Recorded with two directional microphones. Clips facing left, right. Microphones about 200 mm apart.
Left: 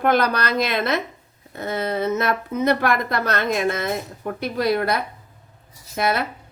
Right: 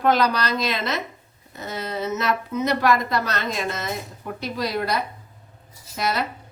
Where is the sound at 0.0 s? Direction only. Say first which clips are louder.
Left 1 dB; 55° left (ahead or behind).